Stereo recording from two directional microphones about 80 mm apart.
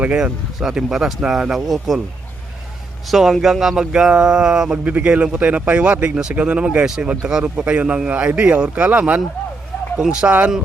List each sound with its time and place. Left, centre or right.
0.0 s a man's voice: centre
3.1 s speech: centre